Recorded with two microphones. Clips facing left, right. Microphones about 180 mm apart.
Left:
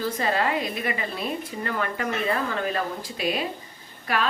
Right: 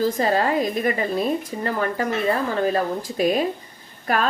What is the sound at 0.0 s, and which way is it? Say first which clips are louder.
Speech: right 5 dB; 40° right (ahead or behind).